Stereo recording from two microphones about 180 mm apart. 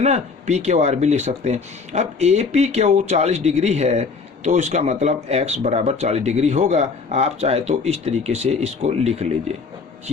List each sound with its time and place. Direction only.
0.0 s speech: 40° right (ahead or behind)